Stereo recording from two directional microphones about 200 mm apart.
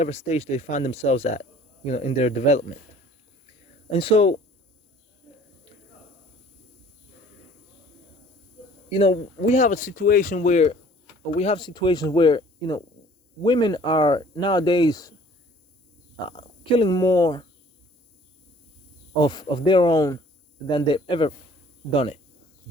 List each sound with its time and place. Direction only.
0.0 s speech: 30° left (ahead or behind)
3.9 s speech: 30° left (ahead or behind)
8.9 s speech: 30° left (ahead or behind)
16.2 s speech: 25° left (ahead or behind)
19.1 s speech: 20° left (ahead or behind)